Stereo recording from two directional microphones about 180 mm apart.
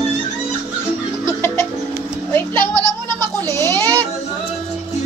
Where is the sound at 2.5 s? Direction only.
20° right (ahead or behind).